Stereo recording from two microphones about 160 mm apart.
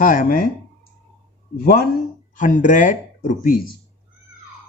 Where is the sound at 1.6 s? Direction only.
70° left (ahead or behind).